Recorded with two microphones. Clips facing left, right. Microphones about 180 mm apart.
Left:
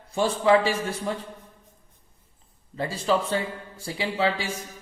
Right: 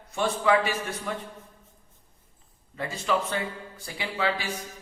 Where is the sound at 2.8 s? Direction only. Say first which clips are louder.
Left 3 dB; 30° left (ahead or behind).